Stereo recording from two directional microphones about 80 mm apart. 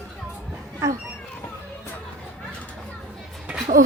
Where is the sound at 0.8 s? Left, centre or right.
Right.